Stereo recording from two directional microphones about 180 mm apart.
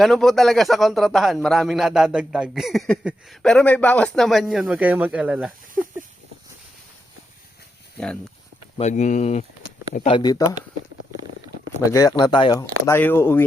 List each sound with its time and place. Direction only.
0.0 s a man's voice: centre (ahead or behind)
7.9 s speech: 5° left (ahead or behind)
8.8 s speech: 40° left (ahead or behind); by 10.6 s 20° left (ahead or behind)
11.9 s speech: 20° left (ahead or behind)
12.8 s speech: 10° left (ahead or behind)